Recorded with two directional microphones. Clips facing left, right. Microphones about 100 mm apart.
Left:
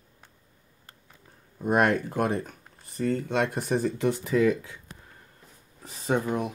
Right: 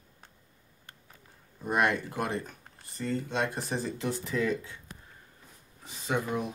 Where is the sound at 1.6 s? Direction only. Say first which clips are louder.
Left 5 dB; 50° left (ahead or behind).